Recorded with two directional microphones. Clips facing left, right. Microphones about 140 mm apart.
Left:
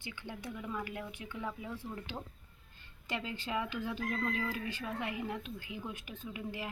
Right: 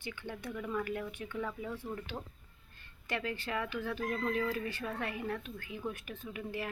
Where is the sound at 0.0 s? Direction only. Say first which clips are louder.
Right 2 dB; 15° left (ahead or behind).